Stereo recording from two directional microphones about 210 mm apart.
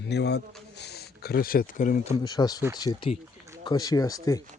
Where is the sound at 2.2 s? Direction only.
20° left (ahead or behind).